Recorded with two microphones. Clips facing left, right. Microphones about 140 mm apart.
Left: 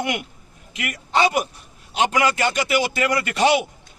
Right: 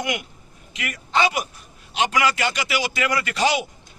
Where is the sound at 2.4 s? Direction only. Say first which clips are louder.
Left 4 dB; 50° left (ahead or behind).